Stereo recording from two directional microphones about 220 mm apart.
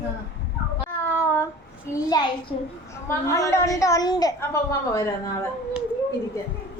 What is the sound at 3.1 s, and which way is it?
A woman's voice, 15° left (ahead or behind).